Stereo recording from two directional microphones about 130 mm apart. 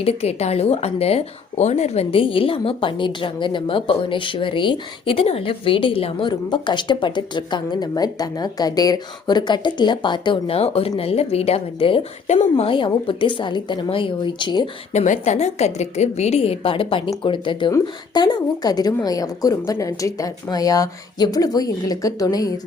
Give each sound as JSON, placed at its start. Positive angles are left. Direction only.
{"t": 0.0, "sound": "speech", "side_deg": 50}
{"t": 12.3, "sound": "a woman's voice", "side_deg": 60}
{"t": 12.7, "sound": "a woman's voice", "side_deg": 40}
{"t": 14.9, "sound": "a woman's voice", "side_deg": 70}